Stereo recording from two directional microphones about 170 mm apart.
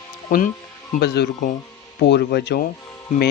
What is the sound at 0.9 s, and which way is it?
Speech, 70° left (ahead or behind).